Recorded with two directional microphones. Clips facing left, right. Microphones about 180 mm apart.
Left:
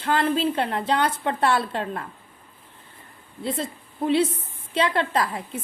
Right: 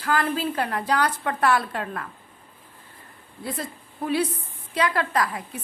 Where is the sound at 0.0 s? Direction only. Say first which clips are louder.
Left 2 dB; 25° left (ahead or behind).